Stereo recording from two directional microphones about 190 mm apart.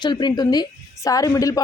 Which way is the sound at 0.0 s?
25° left (ahead or behind).